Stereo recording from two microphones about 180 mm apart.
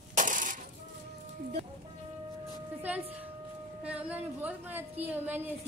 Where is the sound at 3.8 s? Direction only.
5° right (ahead or behind).